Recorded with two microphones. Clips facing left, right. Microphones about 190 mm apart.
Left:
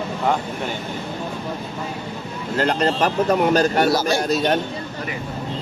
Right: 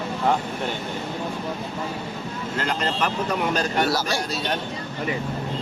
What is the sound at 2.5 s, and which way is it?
A man's voice, 35° left (ahead or behind).